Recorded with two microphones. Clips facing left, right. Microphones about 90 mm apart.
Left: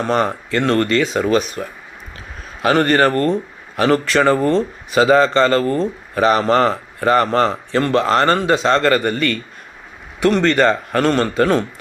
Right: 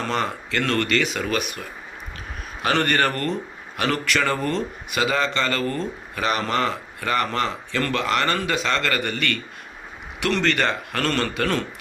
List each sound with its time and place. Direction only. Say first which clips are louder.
0.1 s speech: left 9 dB; 35° left (ahead or behind)
2.7 s a man's voice: left 7 dB; 30° left (ahead or behind)